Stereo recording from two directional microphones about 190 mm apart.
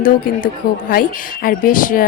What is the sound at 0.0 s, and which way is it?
Speech, 50° left (ahead or behind).